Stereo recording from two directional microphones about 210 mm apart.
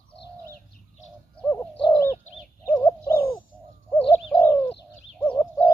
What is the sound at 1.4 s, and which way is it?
Bird, 10° left (ahead or behind).